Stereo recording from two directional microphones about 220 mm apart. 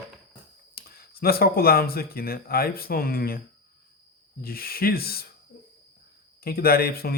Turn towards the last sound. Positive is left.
turn(degrees=45)  # may be behind; listen again after turning